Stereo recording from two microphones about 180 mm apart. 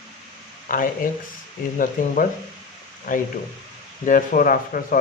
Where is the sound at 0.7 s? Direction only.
50° left (ahead or behind).